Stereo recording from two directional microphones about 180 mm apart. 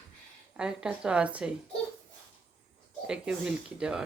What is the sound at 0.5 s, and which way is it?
Speech, 5° right (ahead or behind).